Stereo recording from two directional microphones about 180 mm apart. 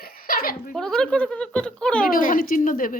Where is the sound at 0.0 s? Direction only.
55° left (ahead or behind).